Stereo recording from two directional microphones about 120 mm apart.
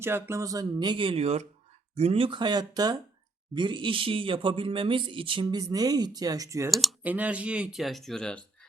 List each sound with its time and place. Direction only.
0.0 s speech: 20° right (ahead or behind)
6.7 s speech: centre (ahead or behind)
7.0 s speech: 15° right (ahead or behind); by 8.4 s 5° left (ahead or behind)